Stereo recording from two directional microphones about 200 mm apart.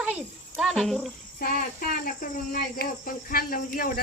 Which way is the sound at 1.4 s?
45° left (ahead or behind).